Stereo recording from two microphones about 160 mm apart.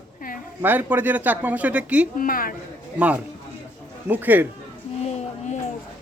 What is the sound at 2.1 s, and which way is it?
Speech, 60° left (ahead or behind).